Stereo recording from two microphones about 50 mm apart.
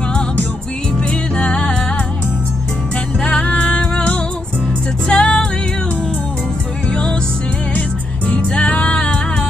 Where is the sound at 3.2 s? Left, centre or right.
Left.